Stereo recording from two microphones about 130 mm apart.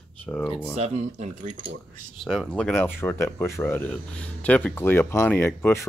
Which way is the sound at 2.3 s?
5° left (ahead or behind).